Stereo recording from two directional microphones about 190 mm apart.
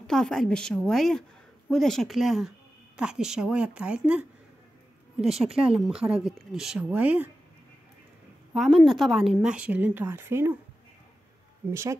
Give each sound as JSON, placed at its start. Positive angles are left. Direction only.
{"t": 0.0, "sound": "speech", "side_deg": 5}
{"t": 5.5, "sound": "speech", "side_deg": -30}
{"t": 5.8, "sound": "speech", "side_deg": 0}
{"t": 8.5, "sound": "speech", "side_deg": 0}
{"t": 11.7, "sound": "speech", "side_deg": -15}